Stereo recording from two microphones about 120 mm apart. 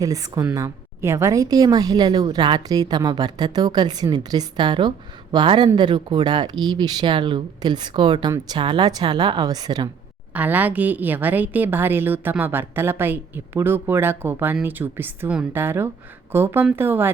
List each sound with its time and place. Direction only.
0.0 s a woman's voice: 30° right (ahead or behind)
10.3 s a woman's voice: 15° right (ahead or behind)